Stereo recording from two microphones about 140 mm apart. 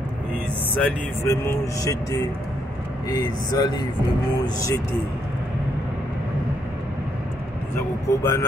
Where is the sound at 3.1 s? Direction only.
25° left (ahead or behind).